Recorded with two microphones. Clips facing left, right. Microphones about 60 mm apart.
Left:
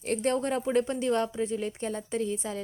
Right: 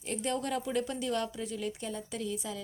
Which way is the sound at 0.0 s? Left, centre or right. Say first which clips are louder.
Left 6 dB; left.